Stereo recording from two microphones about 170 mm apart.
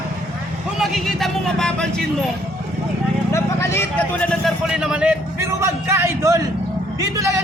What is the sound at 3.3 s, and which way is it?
A man's voice, 15° left (ahead or behind).